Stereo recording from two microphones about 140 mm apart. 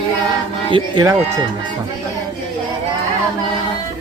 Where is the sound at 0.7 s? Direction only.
30° right (ahead or behind).